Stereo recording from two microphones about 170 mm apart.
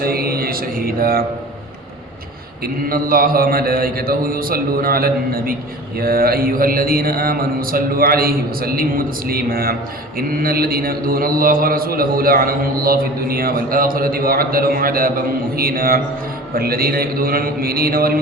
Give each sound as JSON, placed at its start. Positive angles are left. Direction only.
{"t": 0.0, "sound": "mantra", "side_deg": -65}
{"t": 2.9, "sound": "a man's voice", "side_deg": -55}